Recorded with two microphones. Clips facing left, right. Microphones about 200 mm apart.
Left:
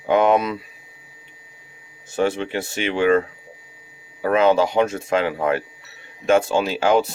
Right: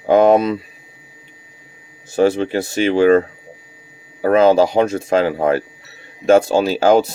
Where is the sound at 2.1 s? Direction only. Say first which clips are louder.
Right 6 dB; 35° right (ahead or behind).